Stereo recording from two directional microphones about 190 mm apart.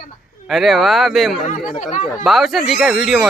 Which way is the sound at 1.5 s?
40° left (ahead or behind).